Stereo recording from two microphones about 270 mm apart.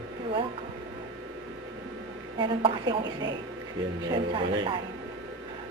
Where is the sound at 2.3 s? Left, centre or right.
Centre.